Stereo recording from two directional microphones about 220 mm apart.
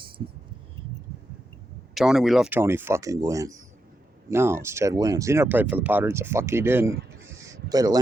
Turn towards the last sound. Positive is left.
turn(degrees=-15)  # may be behind; listen again after turning